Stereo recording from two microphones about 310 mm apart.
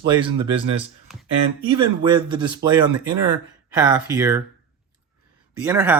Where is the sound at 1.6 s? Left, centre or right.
Centre.